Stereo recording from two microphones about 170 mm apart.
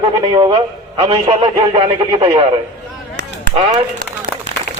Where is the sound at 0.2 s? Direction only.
25° right (ahead or behind).